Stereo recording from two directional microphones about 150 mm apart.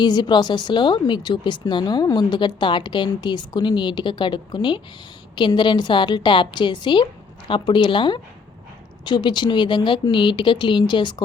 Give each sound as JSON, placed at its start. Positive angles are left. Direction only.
{"t": 0.0, "sound": "speech", "side_deg": 30}